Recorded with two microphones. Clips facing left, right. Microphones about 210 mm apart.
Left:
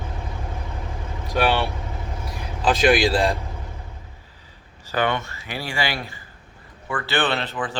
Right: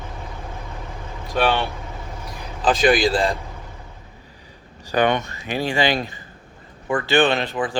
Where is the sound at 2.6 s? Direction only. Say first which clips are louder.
Right 1 dB; 5° left (ahead or behind).